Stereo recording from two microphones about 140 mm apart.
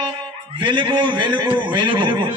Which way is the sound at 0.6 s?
35° right (ahead or behind).